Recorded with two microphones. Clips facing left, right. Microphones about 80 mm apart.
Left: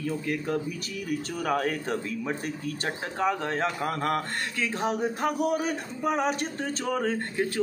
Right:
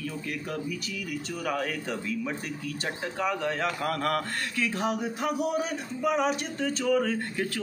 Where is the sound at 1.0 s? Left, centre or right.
Left.